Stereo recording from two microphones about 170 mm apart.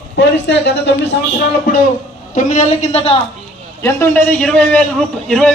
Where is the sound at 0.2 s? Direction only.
90° left.